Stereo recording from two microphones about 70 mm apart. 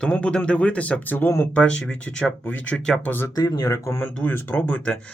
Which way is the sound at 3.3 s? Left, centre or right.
Left.